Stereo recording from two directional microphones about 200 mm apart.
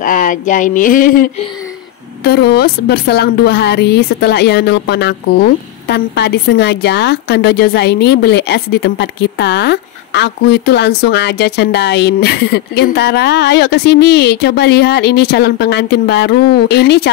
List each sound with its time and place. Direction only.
0.0 s a woman's voice: 40° left (ahead or behind)